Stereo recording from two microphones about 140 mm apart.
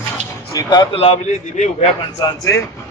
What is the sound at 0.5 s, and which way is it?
Speech, 30° left (ahead or behind).